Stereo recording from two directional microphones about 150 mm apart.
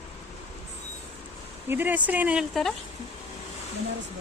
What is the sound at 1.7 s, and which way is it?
Speech, 10° right (ahead or behind).